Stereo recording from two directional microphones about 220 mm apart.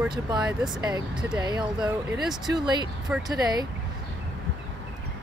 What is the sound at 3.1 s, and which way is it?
Speech, centre (ahead or behind).